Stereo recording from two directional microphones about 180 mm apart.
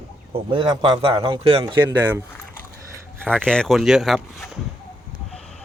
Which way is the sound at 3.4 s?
5° left (ahead or behind).